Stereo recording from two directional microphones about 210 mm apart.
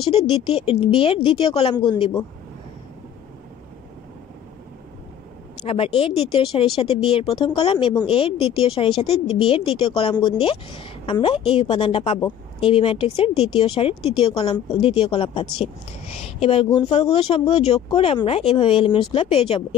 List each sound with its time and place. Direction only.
0.0 s speech: 25° left (ahead or behind)
5.6 s speech: 25° left (ahead or behind)